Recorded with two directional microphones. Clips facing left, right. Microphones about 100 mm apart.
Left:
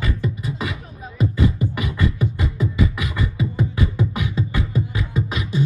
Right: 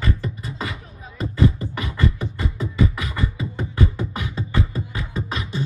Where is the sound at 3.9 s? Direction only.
35° right (ahead or behind).